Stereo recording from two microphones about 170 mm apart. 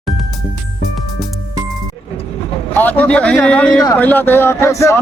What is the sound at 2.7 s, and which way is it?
A man's voice, 10° left (ahead or behind).